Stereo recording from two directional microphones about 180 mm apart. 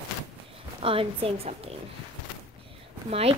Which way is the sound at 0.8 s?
30° right (ahead or behind).